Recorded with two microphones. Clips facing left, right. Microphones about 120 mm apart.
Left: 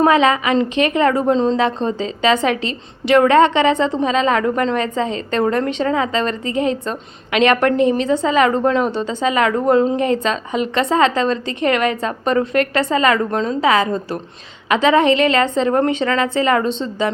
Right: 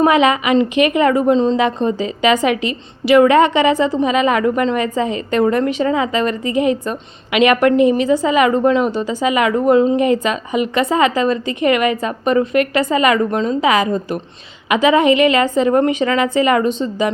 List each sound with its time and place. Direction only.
0.0 s speech: 15° right (ahead or behind)